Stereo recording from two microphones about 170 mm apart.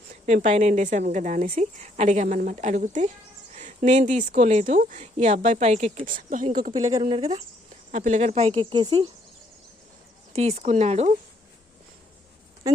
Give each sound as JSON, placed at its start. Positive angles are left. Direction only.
{"t": 0.3, "sound": "speech", "side_deg": -45}
{"t": 10.3, "sound": "speech", "side_deg": -40}